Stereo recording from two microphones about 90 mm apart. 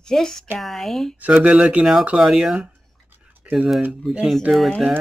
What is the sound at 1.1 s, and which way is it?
Speech, 15° right (ahead or behind).